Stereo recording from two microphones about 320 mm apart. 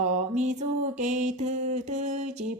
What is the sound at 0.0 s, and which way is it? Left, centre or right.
Music, right.